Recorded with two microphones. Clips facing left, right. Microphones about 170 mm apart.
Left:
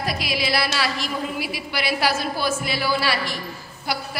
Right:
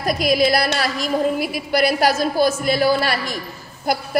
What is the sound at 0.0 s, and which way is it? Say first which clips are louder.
A woman's voice: right 9 dB; 45° right (ahead or behind).